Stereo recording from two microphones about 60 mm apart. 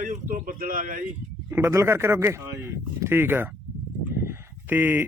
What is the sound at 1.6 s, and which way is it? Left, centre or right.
Speech, right.